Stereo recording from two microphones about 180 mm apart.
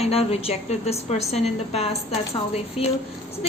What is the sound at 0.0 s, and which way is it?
A woman's voice, 35° left (ahead or behind).